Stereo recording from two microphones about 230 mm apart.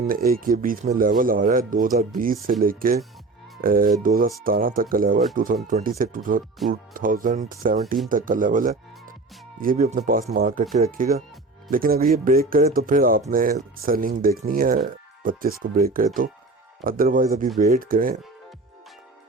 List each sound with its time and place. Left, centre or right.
0.0 s speech: right